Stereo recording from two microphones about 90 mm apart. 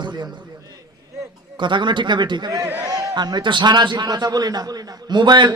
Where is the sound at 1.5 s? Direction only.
60° right (ahead or behind).